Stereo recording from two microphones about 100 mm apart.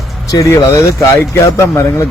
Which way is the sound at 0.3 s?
35° left (ahead or behind).